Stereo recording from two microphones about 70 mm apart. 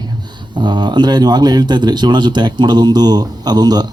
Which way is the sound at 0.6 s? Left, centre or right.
Right.